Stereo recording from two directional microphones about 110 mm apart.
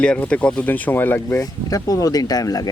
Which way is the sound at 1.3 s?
35° left (ahead or behind).